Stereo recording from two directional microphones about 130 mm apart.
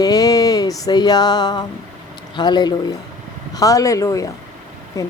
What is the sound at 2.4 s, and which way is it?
Speech, 35° left (ahead or behind).